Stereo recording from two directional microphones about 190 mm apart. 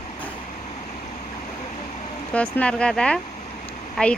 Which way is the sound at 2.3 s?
5° left (ahead or behind).